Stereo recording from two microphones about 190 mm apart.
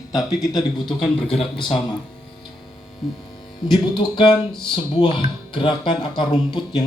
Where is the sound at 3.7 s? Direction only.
25° left (ahead or behind).